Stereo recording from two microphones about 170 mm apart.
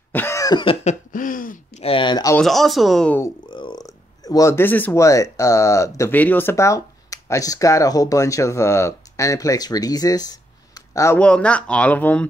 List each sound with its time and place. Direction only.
0.1 s cough: 15° left (ahead or behind)
0.8 s a sound: 50° left (ahead or behind)
1.8 s speech: 30° left (ahead or behind)
2.3 s speech: centre (ahead or behind)
3.4 s speech: 30° left (ahead or behind)
11.1 s speech: 5° left (ahead or behind)